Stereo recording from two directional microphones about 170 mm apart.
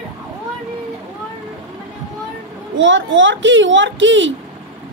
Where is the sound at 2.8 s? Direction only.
90° right.